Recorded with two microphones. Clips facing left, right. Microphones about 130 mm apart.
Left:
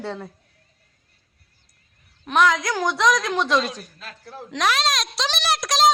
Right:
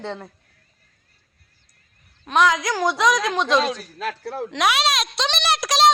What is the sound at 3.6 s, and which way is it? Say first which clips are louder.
Speech: right 4 dB; 80° right.